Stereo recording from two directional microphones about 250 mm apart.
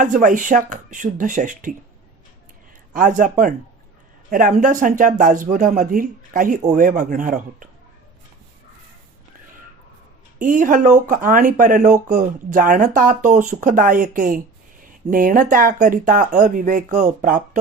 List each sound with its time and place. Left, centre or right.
0.0 s speech: right
2.9 s speech: right
10.3 s speech: right